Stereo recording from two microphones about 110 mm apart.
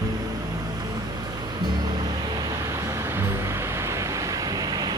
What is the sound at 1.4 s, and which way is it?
Music, 35° right (ahead or behind).